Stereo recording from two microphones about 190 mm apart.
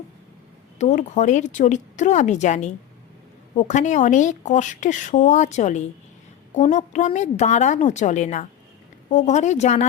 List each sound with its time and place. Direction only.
0.8 s speech: 40° left (ahead or behind)